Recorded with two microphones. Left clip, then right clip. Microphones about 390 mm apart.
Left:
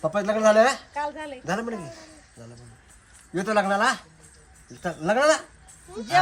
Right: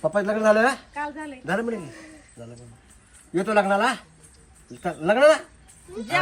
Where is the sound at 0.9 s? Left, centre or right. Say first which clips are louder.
Left 1 dB; left.